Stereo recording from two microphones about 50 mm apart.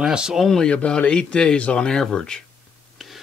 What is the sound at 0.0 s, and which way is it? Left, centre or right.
Speech, centre.